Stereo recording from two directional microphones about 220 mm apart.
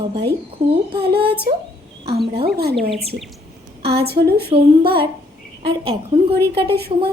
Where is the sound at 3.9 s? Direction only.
45° right (ahead or behind).